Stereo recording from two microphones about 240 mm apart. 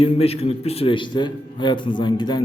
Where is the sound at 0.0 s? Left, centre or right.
Left.